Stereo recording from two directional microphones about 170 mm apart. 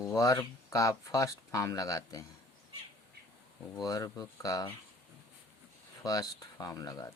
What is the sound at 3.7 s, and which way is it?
Speech, 20° left (ahead or behind).